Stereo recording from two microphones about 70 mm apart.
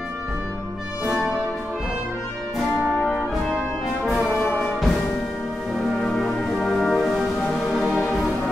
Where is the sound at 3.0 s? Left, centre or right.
Centre.